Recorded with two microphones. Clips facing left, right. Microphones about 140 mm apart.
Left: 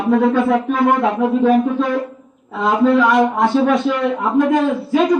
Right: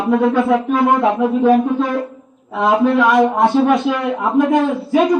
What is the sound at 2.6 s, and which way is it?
Speech, 25° right (ahead or behind).